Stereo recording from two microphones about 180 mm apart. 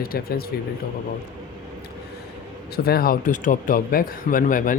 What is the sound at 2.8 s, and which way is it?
Speech, 55° left (ahead or behind).